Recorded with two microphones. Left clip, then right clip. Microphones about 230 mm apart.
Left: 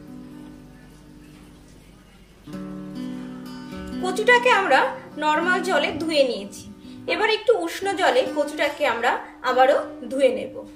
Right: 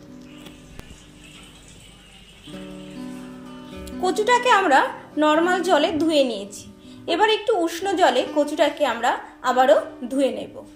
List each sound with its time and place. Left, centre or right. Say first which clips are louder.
4.0 s a woman's voice: left 1 dB; right